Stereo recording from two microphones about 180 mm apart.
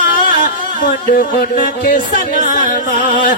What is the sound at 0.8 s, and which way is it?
Music, 50° left (ahead or behind).